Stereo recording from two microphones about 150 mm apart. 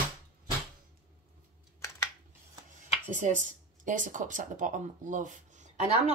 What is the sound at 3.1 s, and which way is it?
Speech, 55° right (ahead or behind).